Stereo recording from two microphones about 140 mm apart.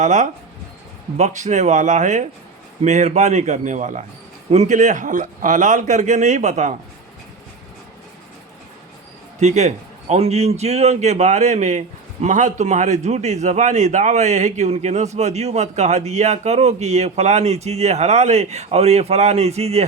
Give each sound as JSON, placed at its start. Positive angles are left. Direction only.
{"t": 0.0, "sound": "a man's voice", "side_deg": -60}
{"t": 9.4, "sound": "a man's voice", "side_deg": -55}